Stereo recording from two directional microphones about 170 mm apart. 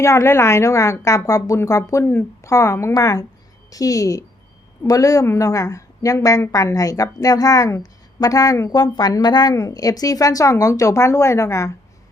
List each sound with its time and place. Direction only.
0.0 s a woman's voice: 15° left (ahead or behind)